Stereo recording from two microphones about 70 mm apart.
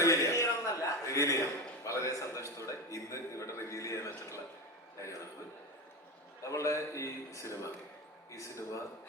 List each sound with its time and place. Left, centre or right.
0.0 s a sound: left
4.9 s a man's voice: left
6.4 s a man's voice: left